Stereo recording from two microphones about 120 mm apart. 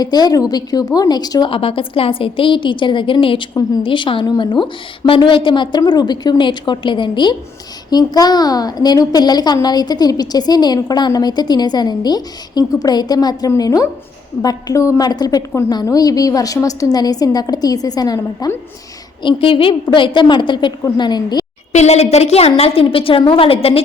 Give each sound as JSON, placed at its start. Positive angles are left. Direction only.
{"t": 0.0, "sound": "a woman's voice", "side_deg": 35}
{"t": 1.5, "sound": "a woman's voice", "side_deg": 50}
{"t": 19.2, "sound": "a woman's voice", "side_deg": 45}
{"t": 21.7, "sound": "a woman's voice", "side_deg": 70}